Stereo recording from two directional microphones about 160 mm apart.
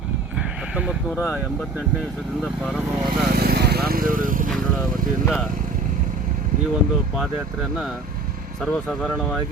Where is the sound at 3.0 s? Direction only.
70° right (ahead or behind).